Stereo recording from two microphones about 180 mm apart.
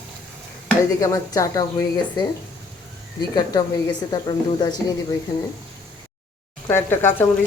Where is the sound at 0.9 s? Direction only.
20° left (ahead or behind).